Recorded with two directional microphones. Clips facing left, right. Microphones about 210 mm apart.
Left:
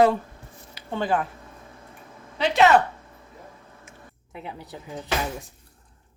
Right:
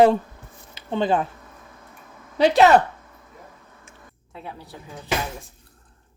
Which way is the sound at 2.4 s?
40° right (ahead or behind).